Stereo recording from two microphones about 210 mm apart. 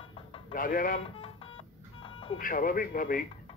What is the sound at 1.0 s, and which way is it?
Music, 25° left (ahead or behind).